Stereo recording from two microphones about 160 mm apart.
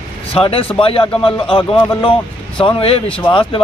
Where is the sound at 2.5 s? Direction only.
35° left (ahead or behind).